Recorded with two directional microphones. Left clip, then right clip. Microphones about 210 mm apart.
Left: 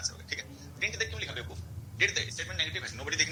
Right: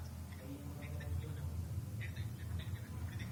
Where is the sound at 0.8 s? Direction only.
50° left (ahead or behind).